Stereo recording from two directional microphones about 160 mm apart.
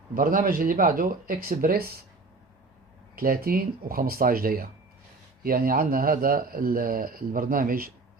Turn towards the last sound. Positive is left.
turn(degrees=-60)  # may be behind; listen again after turning